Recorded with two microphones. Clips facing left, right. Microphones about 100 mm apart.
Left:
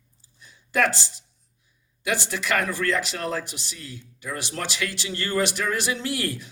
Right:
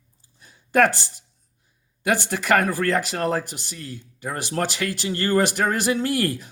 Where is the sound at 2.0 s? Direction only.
50° right (ahead or behind).